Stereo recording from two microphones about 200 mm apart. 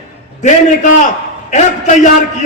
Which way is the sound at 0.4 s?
40° left (ahead or behind).